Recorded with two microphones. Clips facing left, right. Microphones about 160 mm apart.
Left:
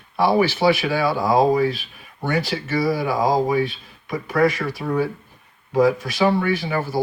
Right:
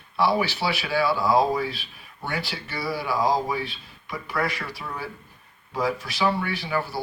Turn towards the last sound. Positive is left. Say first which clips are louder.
# left 5 dB
turn(degrees=45)  # may be behind; listen again after turning